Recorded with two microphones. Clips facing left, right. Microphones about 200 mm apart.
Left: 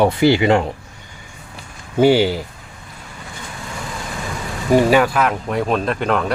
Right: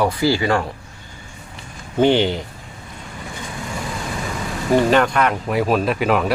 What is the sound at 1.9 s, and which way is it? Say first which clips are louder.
Speech: left 2 dB; 10° left (ahead or behind).